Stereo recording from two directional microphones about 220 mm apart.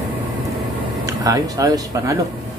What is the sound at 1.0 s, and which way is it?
Speech, 15° right (ahead or behind).